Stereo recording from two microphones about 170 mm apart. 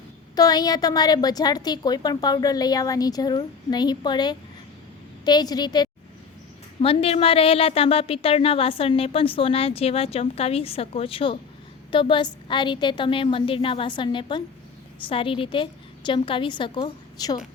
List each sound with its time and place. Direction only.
0.3 s a woman's voice: 20° left (ahead or behind)
6.8 s a woman's voice: 35° left (ahead or behind)